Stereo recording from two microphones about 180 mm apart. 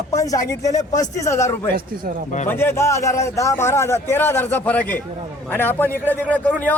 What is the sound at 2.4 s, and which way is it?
A man's voice, 10° left (ahead or behind).